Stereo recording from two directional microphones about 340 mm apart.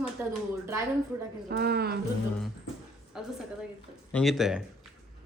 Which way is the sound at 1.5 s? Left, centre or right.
Right.